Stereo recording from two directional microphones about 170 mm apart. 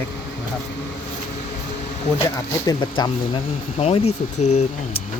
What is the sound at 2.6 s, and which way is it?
Speech, 25° left (ahead or behind).